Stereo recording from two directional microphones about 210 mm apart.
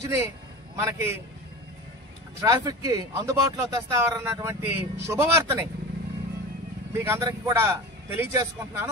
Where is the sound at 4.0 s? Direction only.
15° right (ahead or behind).